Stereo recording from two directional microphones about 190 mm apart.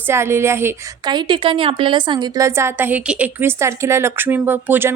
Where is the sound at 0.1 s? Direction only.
15° right (ahead or behind).